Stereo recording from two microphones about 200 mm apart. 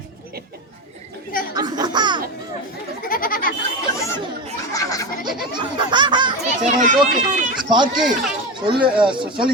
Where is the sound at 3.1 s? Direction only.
45° left (ahead or behind).